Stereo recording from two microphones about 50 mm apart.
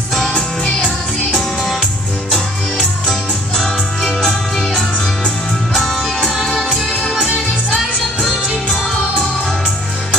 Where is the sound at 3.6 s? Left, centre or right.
Centre.